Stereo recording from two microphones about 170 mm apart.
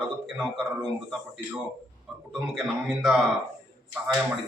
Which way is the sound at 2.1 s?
5° right (ahead or behind).